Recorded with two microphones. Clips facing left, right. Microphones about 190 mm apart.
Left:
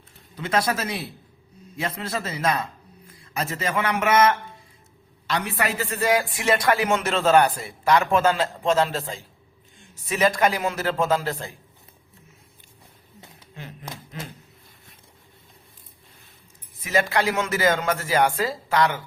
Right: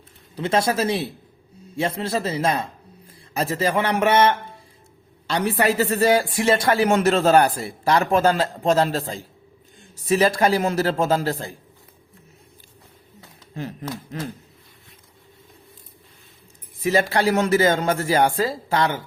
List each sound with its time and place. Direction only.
0.3 s a man's voice: 30° right (ahead or behind)
16.8 s speech: 30° right (ahead or behind)